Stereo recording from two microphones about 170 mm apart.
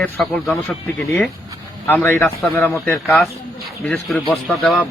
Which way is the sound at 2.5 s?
Centre (ahead or behind).